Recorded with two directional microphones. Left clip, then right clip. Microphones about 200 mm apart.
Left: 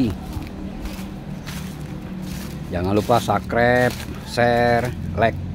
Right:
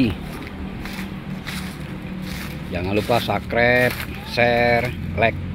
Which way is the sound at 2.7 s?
20° left (ahead or behind).